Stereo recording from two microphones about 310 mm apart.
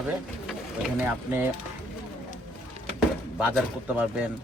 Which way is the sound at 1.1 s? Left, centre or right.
Centre.